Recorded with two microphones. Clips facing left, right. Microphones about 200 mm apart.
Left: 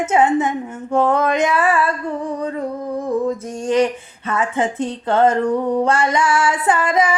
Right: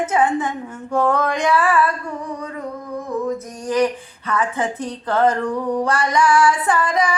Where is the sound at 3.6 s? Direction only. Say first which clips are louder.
Left 2 dB; 25° left (ahead or behind).